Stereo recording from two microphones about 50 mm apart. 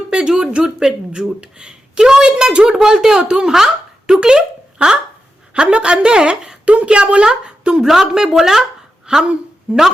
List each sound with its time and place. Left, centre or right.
0.1 s a woman's voice: centre